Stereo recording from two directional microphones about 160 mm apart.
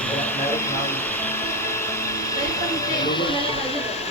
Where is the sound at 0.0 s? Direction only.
10° left (ahead or behind).